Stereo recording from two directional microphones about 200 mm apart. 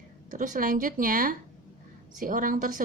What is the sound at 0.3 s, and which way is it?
Speech, 40° right (ahead or behind).